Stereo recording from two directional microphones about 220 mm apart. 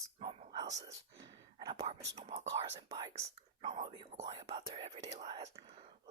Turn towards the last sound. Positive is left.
turn(degrees=-20)  # may be behind; listen again after turning